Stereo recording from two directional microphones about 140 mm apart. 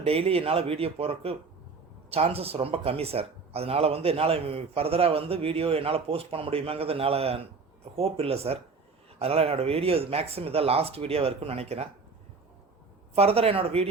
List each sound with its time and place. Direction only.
0.0 s speech: 45° right (ahead or behind)
13.1 s speech: 45° right (ahead or behind)